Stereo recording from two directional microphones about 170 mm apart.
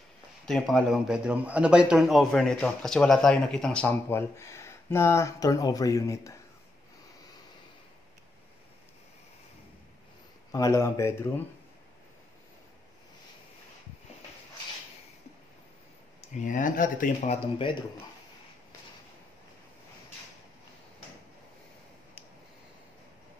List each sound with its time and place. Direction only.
0.5 s speech: centre (ahead or behind); by 6.3 s 20° left (ahead or behind)
10.5 s speech: 20° left (ahead or behind)
16.3 s speech: 50° left (ahead or behind)
17.6 s speech: 30° left (ahead or behind)